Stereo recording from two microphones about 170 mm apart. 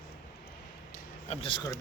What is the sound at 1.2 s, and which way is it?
Speech, 30° left (ahead or behind).